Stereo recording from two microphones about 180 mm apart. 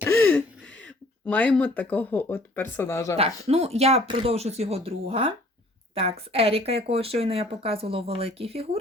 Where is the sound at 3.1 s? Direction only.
35° right (ahead or behind).